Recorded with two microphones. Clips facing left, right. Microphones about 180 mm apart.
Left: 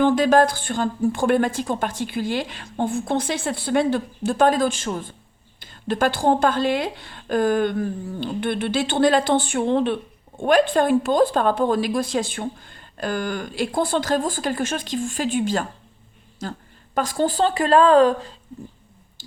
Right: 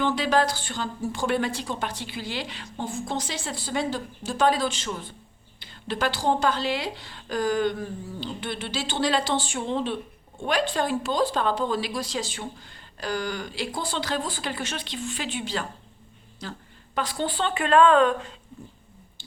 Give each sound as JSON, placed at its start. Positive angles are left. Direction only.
{"t": 0.0, "sound": "a woman's voice", "side_deg": 50}